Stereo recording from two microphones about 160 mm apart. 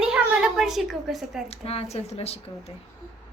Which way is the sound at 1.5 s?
40° left (ahead or behind).